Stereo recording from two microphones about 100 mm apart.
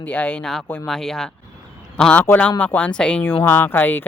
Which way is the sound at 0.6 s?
20° left (ahead or behind).